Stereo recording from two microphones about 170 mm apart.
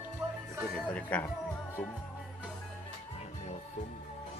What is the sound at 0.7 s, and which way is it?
Speech, 10° left (ahead or behind).